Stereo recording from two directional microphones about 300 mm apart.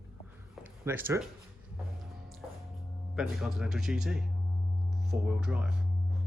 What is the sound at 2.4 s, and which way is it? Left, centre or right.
Music, centre.